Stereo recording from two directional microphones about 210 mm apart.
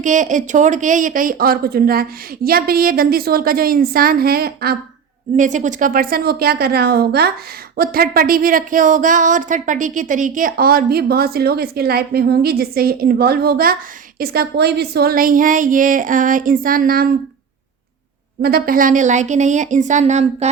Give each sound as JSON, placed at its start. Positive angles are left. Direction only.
{"t": 0.0, "sound": "speech", "side_deg": -35}
{"t": 5.4, "sound": "speech", "side_deg": -35}
{"t": 18.4, "sound": "speech", "side_deg": -45}